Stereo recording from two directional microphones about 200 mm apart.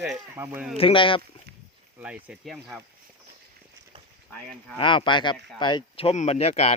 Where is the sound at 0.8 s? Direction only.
25° left (ahead or behind).